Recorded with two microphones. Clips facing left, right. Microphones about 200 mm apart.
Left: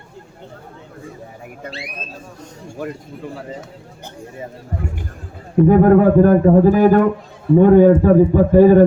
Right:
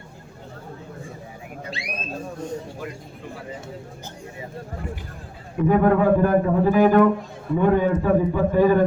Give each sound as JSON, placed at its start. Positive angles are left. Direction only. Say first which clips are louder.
{"t": 5.6, "sound": "speech", "louder": "left 6 dB", "side_deg": 40}